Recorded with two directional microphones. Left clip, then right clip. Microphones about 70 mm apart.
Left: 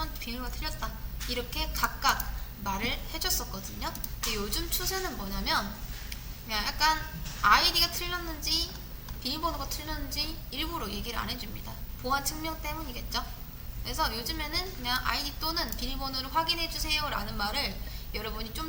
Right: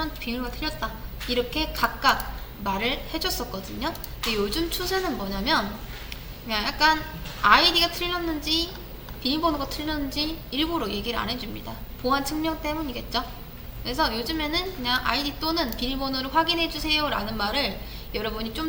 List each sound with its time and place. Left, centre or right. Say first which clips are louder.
0.0 s a woman's voice: right 7 dB; left
6.1 s a sound: right 6 dB; left
7.4 s a woman's voice: right 5 dB; left